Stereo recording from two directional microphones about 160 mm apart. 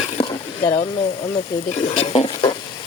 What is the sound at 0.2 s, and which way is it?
Speech, 35° left (ahead or behind).